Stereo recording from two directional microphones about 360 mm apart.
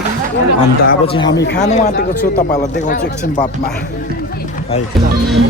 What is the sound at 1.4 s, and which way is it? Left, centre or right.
Speech, left.